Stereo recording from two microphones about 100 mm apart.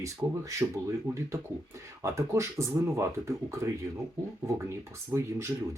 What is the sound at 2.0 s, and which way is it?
Speech, 30° right (ahead or behind).